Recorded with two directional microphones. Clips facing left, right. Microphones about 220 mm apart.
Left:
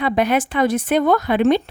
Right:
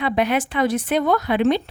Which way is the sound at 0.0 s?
45° left (ahead or behind).